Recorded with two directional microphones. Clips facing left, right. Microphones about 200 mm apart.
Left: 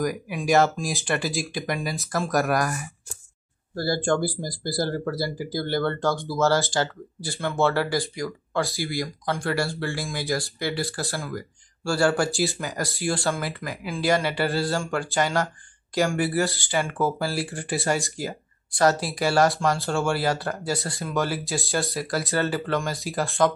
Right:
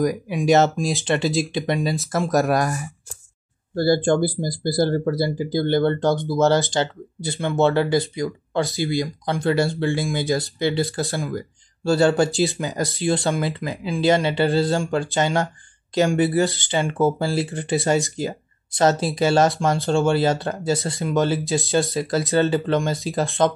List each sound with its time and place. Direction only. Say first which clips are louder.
0.0 s speech: right 6 dB; 25° right (ahead or behind)